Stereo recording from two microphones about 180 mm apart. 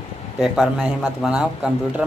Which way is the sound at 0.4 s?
Centre (ahead or behind).